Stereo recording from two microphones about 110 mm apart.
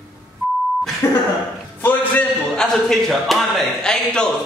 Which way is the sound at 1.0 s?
25° left (ahead or behind).